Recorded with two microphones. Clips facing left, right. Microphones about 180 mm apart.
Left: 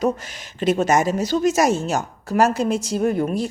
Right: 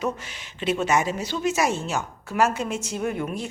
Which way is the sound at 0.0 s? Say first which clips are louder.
Left 6 dB; 40° left (ahead or behind).